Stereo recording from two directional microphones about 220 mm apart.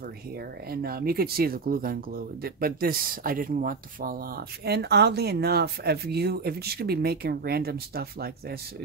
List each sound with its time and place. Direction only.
0.7 s speech: 45° right (ahead or behind)